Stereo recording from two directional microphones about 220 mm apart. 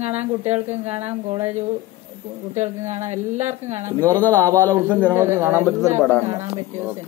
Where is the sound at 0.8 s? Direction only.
30° right (ahead or behind).